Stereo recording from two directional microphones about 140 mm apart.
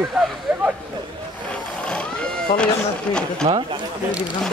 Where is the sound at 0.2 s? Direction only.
5° right (ahead or behind).